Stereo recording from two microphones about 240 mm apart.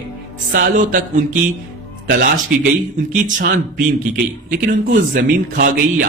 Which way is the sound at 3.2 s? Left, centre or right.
Right.